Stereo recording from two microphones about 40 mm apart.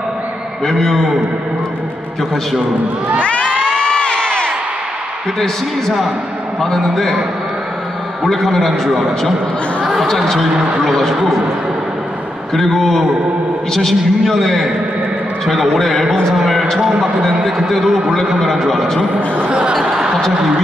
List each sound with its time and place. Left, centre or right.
0.7 s a man's voice: centre
3.6 s crowd: centre
4.2 s a sound: centre
6.6 s a man's voice: centre
8.2 s a man's voice: centre
12.5 s a man's voice: centre
17.3 s a man's voice: centre
17.6 s a man's voice: centre
19.7 s a sound: centre